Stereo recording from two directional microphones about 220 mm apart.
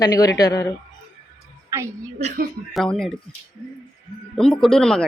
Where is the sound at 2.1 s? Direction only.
35° right (ahead or behind).